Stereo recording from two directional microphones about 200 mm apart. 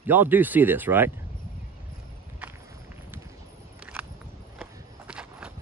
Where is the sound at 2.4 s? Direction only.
10° right (ahead or behind).